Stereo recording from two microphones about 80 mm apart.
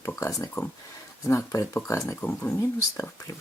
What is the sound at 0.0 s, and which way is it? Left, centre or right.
Speech, left.